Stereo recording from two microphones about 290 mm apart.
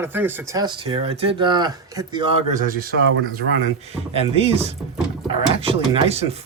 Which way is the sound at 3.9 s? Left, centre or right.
Centre.